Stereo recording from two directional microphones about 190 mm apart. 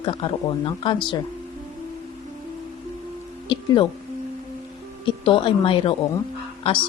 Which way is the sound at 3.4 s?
25° left (ahead or behind).